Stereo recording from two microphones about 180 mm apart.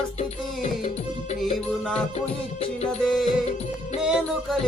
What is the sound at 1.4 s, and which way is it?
Music, centre (ahead or behind).